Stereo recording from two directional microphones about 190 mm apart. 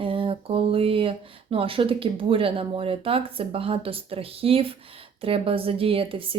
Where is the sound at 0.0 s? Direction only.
30° right (ahead or behind).